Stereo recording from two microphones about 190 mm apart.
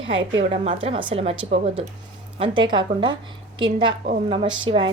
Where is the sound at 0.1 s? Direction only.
75° right (ahead or behind).